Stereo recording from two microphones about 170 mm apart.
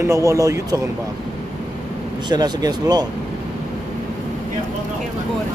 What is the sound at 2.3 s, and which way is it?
Speech, 25° right (ahead or behind).